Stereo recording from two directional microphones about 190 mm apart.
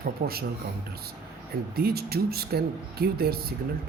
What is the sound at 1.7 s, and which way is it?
Speech, 55° right (ahead or behind).